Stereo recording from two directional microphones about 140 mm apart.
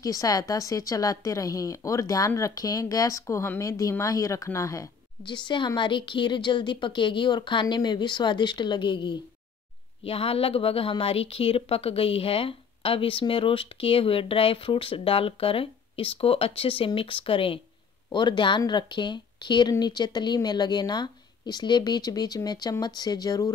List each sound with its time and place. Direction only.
0.0 s a woman's voice: 25° left (ahead or behind)